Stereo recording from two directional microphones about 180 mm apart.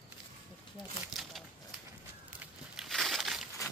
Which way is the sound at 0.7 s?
Centre (ahead or behind).